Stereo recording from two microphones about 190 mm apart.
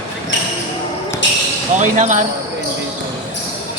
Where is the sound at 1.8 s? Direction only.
40° right (ahead or behind).